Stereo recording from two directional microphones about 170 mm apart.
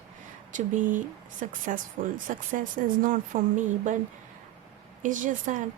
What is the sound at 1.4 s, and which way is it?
Speech, 45° right (ahead or behind).